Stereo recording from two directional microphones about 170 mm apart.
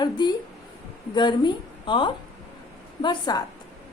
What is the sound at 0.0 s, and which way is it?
A woman's voice, 25° left (ahead or behind).